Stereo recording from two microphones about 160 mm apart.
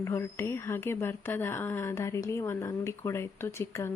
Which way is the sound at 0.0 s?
15° left (ahead or behind).